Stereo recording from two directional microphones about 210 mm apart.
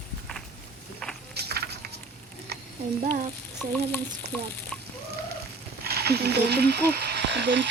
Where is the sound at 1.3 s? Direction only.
50° right (ahead or behind).